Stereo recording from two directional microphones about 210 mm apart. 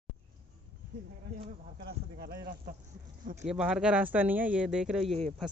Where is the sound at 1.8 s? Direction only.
45° right (ahead or behind).